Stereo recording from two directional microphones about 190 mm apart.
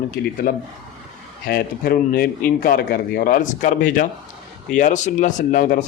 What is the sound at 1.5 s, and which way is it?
Speech, 55° left (ahead or behind).